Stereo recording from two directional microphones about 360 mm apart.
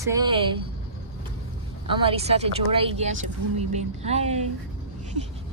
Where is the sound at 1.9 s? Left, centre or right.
Centre.